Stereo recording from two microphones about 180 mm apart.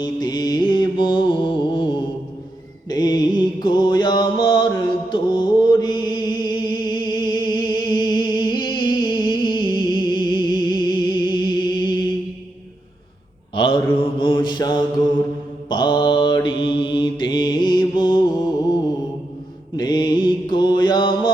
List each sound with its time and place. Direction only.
0.0 s mantra: 25° left (ahead or behind)
14.0 s mantra: 25° left (ahead or behind)